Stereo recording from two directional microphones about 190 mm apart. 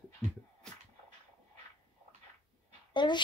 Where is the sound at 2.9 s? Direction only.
25° left (ahead or behind).